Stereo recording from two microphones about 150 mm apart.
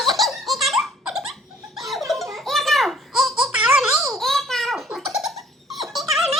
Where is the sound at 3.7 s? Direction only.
Centre (ahead or behind).